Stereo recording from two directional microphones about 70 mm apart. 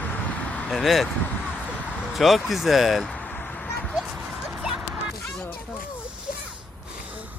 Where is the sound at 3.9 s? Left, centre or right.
Centre.